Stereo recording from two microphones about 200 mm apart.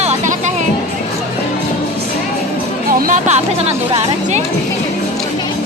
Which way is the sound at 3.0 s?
40° right (ahead or behind).